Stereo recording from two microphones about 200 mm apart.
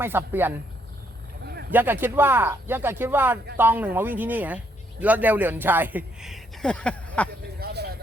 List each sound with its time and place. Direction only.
0.0 s speech: 10° right (ahead or behind)
1.7 s speech: 10° right (ahead or behind); by 7.3 s 5° left (ahead or behind)
7.6 s vehicle: 55° right (ahead or behind)